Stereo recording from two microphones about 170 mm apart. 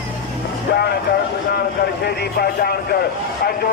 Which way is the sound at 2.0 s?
65° left (ahead or behind).